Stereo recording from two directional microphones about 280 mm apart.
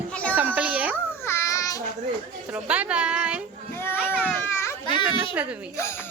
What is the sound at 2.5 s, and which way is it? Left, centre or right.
Speech, centre.